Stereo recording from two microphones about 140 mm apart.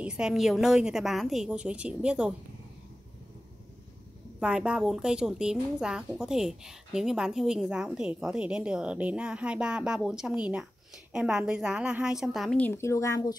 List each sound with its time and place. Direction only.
0.0 s a woman's voice: 5° right (ahead or behind)
4.4 s a woman's voice: 5° right (ahead or behind)
12.5 s speech: 15° left (ahead or behind)